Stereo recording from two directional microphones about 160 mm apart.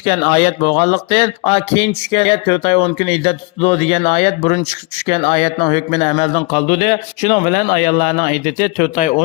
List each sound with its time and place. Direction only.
0.2 s speech: 30° left (ahead or behind)
0.8 s speech: 45° left (ahead or behind)
6.3 s speech: 30° left (ahead or behind)
6.7 s a man's voice: 45° left (ahead or behind)